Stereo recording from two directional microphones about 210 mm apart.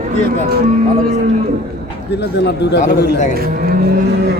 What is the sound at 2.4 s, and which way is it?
Speech, 50° left (ahead or behind).